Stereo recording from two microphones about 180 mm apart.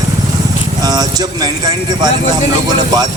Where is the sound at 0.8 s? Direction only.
20° right (ahead or behind).